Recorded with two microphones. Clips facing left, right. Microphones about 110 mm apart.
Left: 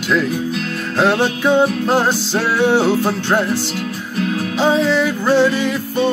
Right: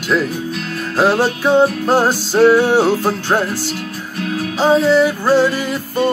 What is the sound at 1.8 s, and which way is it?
Music, 10° right (ahead or behind).